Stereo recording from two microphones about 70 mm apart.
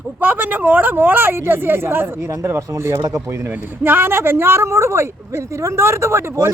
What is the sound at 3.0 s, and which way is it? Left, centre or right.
Speech, right.